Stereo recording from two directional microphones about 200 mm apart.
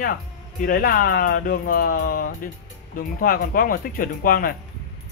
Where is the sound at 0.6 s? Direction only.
45° left (ahead or behind).